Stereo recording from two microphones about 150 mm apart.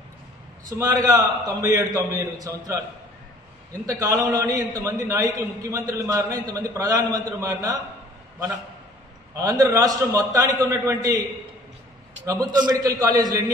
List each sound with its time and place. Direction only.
0.7 s a man's voice: 25° right (ahead or behind)
3.8 s a man's voice: 20° right (ahead or behind)
9.4 s a man's voice: 20° right (ahead or behind)
12.3 s a man's voice: 25° right (ahead or behind)